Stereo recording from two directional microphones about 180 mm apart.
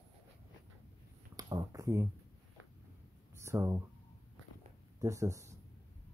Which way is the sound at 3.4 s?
15° right (ahead or behind).